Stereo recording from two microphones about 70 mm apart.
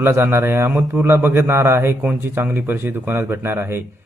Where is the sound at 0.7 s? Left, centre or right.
Centre.